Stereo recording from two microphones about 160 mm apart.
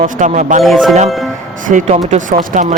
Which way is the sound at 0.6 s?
Centre (ahead or behind).